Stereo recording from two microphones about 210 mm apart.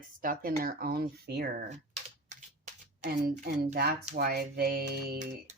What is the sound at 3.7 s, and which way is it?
Speech, 50° right (ahead or behind).